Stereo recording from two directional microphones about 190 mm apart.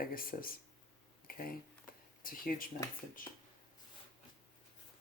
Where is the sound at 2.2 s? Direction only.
50° left (ahead or behind).